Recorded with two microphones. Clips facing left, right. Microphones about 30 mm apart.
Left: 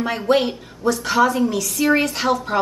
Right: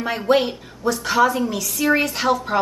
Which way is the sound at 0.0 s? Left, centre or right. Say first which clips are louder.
Even; centre.